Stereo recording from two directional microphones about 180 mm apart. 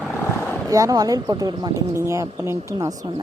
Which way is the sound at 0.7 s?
20° right (ahead or behind).